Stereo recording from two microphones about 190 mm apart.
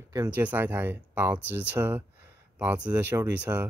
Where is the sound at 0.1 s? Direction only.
10° right (ahead or behind).